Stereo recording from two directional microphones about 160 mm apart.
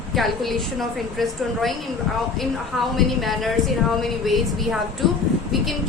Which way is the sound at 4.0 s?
Centre (ahead or behind).